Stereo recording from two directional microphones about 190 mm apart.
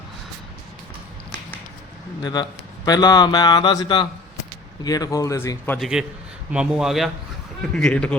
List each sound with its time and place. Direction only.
2.2 s speech: 20° left (ahead or behind)
5.8 s speech: 5° right (ahead or behind)